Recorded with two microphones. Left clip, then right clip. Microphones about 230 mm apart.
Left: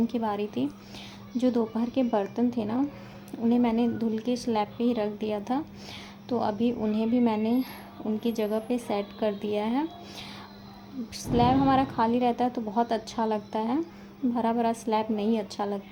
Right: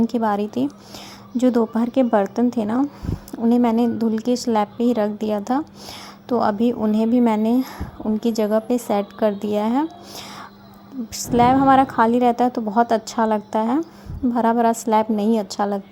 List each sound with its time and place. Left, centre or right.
0.1 s a woman's voice: right